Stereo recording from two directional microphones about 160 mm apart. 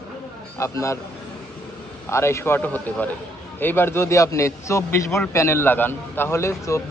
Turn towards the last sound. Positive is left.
turn(degrees=15)  # may be behind; listen again after turning